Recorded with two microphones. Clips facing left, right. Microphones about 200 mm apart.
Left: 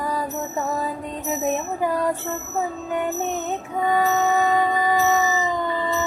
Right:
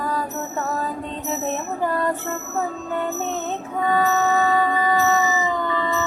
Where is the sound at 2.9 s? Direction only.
15° left (ahead or behind).